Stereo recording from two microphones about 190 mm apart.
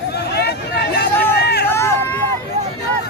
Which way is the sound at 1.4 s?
60° left (ahead or behind).